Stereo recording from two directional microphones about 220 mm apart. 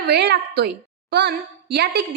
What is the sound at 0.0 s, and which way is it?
A woman's voice, 50° right (ahead or behind).